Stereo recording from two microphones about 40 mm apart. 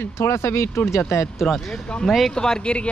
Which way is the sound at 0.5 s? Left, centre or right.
Left.